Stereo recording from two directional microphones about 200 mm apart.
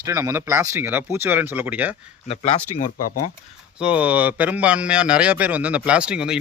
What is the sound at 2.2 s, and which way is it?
Speech, 30° left (ahead or behind).